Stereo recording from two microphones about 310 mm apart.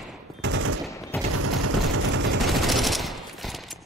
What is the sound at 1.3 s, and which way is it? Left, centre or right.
Fusillade, right.